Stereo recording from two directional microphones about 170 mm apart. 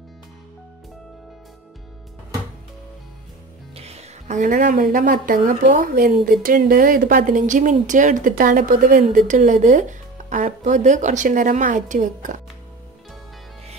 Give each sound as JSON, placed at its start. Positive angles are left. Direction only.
{"t": 3.7, "sound": "a woman's voice", "side_deg": -35}